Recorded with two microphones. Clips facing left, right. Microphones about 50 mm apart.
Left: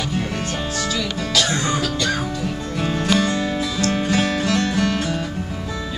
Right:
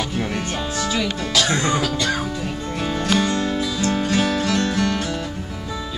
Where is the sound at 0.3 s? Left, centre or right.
Centre.